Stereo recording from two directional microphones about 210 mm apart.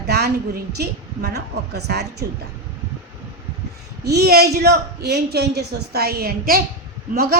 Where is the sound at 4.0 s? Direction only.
50° right (ahead or behind).